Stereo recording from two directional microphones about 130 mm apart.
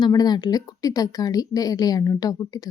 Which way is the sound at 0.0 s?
30° left (ahead or behind).